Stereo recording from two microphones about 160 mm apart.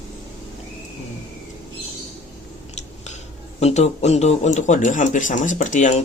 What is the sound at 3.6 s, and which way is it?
Speech, 40° left (ahead or behind).